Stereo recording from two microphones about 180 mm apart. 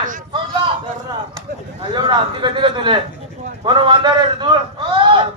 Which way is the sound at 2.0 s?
25° right (ahead or behind).